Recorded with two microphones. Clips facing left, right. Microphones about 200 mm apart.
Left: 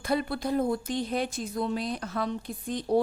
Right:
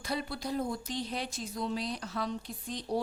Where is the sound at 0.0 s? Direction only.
55° left (ahead or behind).